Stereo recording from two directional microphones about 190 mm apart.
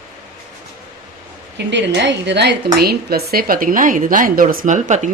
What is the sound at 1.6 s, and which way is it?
A woman's voice, 70° right (ahead or behind).